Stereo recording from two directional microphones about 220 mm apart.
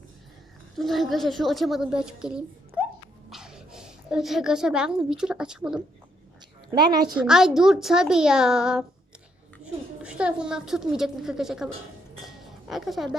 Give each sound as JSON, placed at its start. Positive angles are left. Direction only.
{"t": 0.8, "sound": "a woman's voice", "side_deg": 0}
{"t": 6.7, "sound": "a woman's voice", "side_deg": -20}
{"t": 7.1, "sound": "a woman's voice", "side_deg": 0}
{"t": 12.2, "sound": "chink", "side_deg": 0}